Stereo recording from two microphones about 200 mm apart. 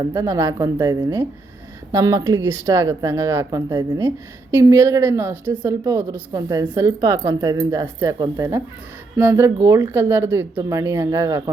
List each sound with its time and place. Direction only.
0.0 s speech: 20° right (ahead or behind)